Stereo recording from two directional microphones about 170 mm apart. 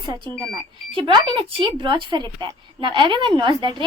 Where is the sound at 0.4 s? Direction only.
25° right (ahead or behind).